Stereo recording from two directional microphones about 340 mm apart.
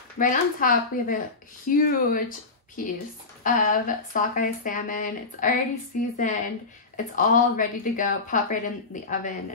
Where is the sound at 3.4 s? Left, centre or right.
Left.